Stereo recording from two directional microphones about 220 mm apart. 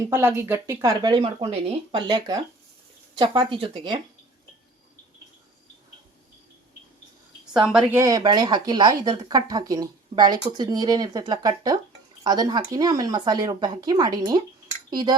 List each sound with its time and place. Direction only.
0.1 s speech: 10° right (ahead or behind)
7.7 s speech: 5° right (ahead or behind)
14.8 s dishes: 20° right (ahead or behind)